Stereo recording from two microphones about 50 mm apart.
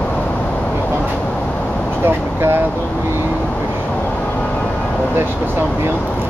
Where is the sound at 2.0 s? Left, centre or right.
Right.